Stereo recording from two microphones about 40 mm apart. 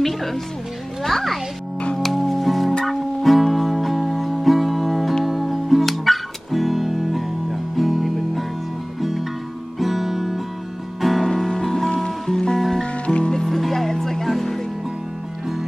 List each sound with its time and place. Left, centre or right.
0.0 s music: centre
1.0 s a child's voice: centre
2.0 s music: centre
9.8 s guitar: centre
11.0 s music: centre
12.3 s music: centre
12.5 s music: centre
12.8 s music: left
13.3 s music: centre